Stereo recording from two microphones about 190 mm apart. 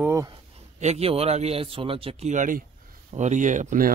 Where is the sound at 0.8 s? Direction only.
35° right (ahead or behind).